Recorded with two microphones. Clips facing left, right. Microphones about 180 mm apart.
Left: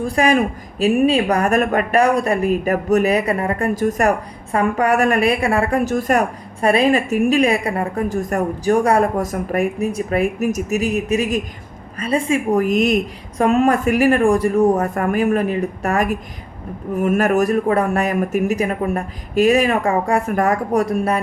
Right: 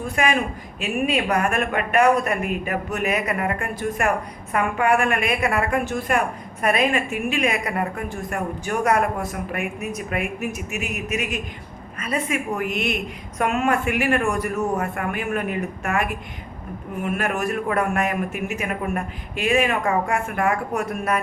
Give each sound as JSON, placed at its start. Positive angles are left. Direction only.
{"t": 0.0, "sound": "a woman's voice", "side_deg": 35}